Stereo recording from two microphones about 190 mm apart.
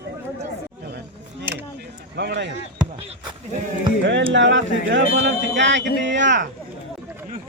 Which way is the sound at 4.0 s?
70° right (ahead or behind).